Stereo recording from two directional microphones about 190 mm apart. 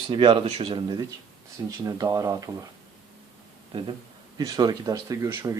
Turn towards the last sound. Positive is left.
turn(degrees=-15)  # may be behind; listen again after turning